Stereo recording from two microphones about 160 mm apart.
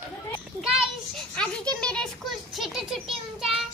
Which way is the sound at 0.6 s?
5° right (ahead or behind).